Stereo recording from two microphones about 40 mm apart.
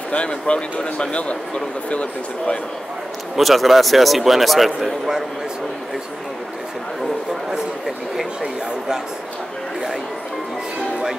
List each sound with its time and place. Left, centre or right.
0.1 s speech: left
3.3 s a man's voice: centre
8.4 s speech: centre